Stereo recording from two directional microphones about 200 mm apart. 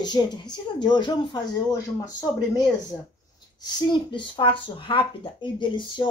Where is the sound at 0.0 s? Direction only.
20° left (ahead or behind).